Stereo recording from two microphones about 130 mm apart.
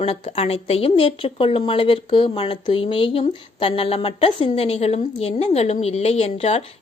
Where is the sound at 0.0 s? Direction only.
50° left (ahead or behind).